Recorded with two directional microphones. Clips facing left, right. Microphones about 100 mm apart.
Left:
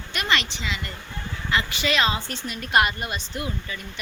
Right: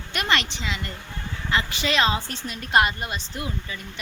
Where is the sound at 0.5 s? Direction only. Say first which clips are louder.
Even; 40° right (ahead or behind).